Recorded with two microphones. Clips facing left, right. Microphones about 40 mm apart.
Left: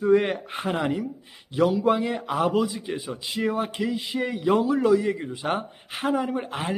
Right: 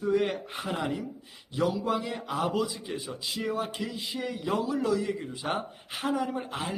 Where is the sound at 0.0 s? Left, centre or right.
Left.